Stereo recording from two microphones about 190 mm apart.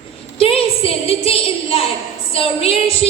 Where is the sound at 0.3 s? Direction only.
30° left (ahead or behind).